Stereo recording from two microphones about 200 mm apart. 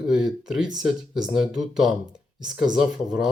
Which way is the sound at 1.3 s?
Centre (ahead or behind).